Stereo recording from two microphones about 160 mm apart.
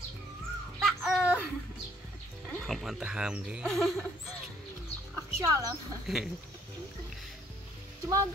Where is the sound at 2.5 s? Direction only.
5° left (ahead or behind).